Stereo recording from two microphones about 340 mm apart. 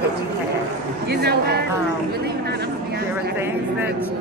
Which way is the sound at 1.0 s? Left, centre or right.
Right.